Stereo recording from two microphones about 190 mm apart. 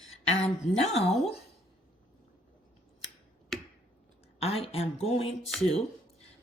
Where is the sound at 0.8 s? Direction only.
35° left (ahead or behind).